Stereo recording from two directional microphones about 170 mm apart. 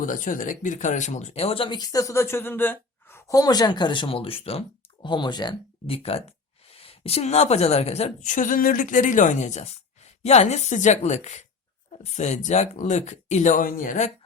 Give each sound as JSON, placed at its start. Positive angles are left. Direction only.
{"t": 0.0, "sound": "a woman's voice", "side_deg": 50}